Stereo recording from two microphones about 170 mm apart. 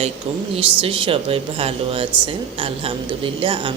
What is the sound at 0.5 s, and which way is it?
A woman's voice, 30° right (ahead or behind).